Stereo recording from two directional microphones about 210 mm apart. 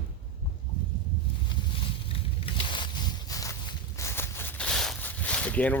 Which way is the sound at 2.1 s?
25° left (ahead or behind).